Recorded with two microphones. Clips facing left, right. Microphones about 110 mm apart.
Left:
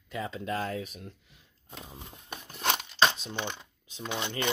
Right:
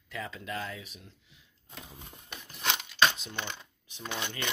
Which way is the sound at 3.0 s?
30° left (ahead or behind).